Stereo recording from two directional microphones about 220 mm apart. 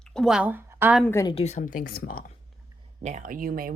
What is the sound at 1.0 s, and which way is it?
Speech, 10° left (ahead or behind).